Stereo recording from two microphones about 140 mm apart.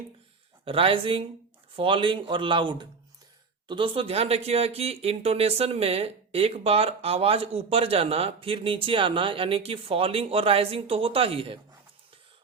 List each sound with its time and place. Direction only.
0.6 s speech: 40° right (ahead or behind)